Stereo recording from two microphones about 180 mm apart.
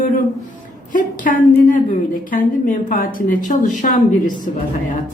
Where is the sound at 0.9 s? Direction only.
50° left (ahead or behind).